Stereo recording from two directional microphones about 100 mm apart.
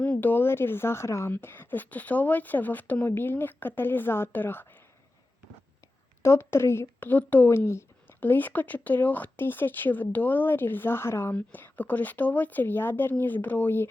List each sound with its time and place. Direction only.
0.0 s speech: 15° left (ahead or behind)
6.2 s speech: 25° left (ahead or behind)